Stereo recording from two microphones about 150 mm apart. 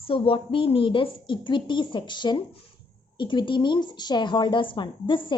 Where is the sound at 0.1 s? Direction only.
35° left (ahead or behind).